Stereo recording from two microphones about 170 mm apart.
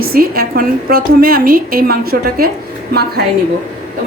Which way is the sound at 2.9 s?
70° right (ahead or behind).